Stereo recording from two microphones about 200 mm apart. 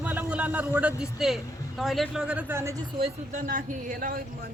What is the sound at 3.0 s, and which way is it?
Speech, 40° right (ahead or behind).